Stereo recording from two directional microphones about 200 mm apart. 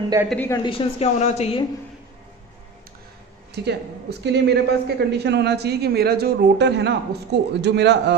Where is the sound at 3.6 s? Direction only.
55° right (ahead or behind).